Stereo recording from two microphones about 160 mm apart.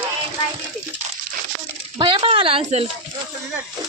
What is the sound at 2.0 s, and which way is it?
Speech, 30° right (ahead or behind).